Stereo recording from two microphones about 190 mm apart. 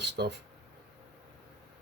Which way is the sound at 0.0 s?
60° right (ahead or behind).